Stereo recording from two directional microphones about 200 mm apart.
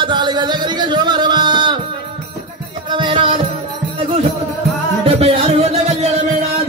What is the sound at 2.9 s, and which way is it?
Music, 25° right (ahead or behind).